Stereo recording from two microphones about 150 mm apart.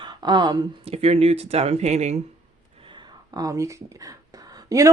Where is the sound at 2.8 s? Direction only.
30° right (ahead or behind).